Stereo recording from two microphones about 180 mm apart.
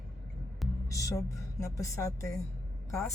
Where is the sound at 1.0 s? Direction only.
15° left (ahead or behind).